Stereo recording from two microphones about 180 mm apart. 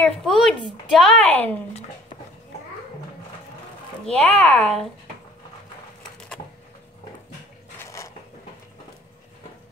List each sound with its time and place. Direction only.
0.2 s a woman's voice: centre (ahead or behind)
4.0 s a woman's voice: 5° left (ahead or behind)
7.8 s mechanisms: 15° left (ahead or behind)